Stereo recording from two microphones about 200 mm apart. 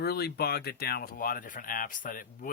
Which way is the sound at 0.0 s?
50° left (ahead or behind).